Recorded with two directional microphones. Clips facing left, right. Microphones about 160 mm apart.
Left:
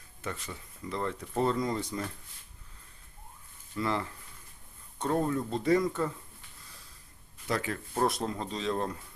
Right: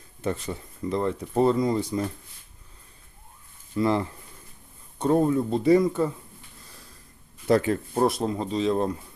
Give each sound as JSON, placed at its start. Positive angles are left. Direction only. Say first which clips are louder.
{"t": 0.2, "sound": "speech", "louder": "right 10 dB", "side_deg": -30}
{"t": 3.8, "sound": "speech", "louder": "right 8 dB", "side_deg": -20}
{"t": 7.4, "sound": "speech", "louder": "right 11 dB", "side_deg": -30}
{"t": 8.0, "sound": "speech", "louder": "right 5 dB", "side_deg": -15}